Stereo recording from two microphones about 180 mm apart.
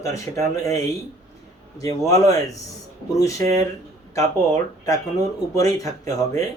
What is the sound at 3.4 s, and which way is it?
Speech, 40° right (ahead or behind).